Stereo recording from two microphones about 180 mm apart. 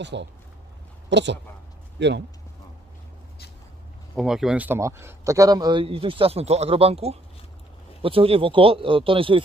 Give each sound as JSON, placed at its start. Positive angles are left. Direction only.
{"t": 0.0, "sound": "speech", "side_deg": -75}
{"t": 4.1, "sound": "a man's voice", "side_deg": 0}